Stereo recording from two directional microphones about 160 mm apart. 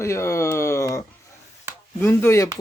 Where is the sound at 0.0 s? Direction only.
20° left (ahead or behind).